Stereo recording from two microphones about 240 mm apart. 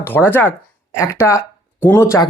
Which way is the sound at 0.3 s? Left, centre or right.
Centre.